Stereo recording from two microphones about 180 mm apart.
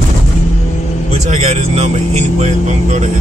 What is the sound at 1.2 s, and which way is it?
Speech, 40° right (ahead or behind).